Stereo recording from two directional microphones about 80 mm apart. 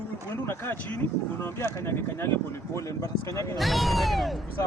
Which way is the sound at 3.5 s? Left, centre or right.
Centre.